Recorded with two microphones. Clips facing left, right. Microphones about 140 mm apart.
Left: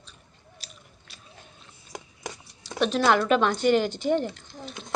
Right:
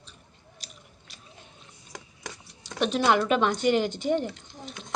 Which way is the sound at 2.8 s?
15° right (ahead or behind).